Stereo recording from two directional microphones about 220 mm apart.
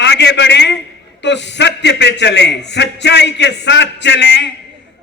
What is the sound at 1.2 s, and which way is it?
A man's voice, 55° left (ahead or behind).